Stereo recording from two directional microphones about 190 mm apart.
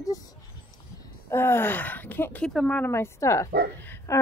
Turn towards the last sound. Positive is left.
turn(degrees=10)  # may be behind; listen again after turning